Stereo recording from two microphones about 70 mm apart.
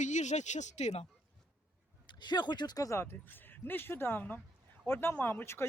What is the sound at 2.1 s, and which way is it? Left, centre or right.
Speech, left.